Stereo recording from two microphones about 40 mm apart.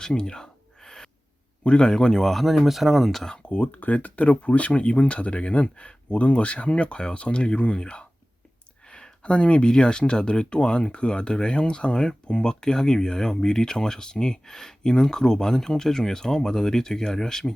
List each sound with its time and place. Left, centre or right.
0.0 s a sound: centre
1.6 s speech: left
2.2 s speech: centre
3.5 s speech: left; by 17.5 s centre